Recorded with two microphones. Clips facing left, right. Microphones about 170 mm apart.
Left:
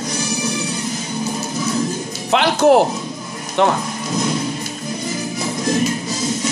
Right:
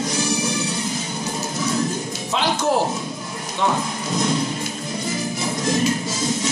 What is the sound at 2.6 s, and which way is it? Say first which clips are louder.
Speech: left 10 dB; 90° left.